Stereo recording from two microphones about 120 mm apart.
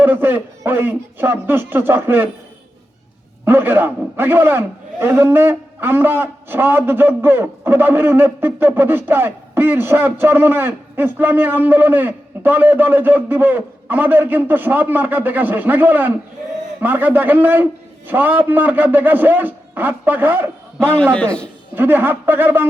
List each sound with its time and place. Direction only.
0.0 s a man's voice: 15° right (ahead or behind)
3.4 s a man's voice: 15° right (ahead or behind)
21.0 s a man's voice: 10° left (ahead or behind)
21.8 s a man's voice: 20° right (ahead or behind)